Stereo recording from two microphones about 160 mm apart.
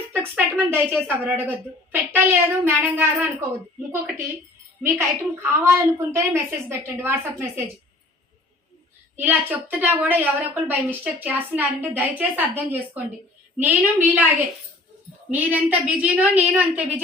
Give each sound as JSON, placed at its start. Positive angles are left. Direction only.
{"t": 0.1, "sound": "a woman's voice", "side_deg": -10}
{"t": 4.8, "sound": "a woman's voice", "side_deg": -15}
{"t": 9.1, "sound": "a woman's voice", "side_deg": -10}
{"t": 15.3, "sound": "a woman's voice", "side_deg": -10}